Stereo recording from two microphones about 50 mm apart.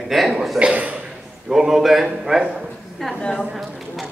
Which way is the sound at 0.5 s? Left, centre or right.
Right.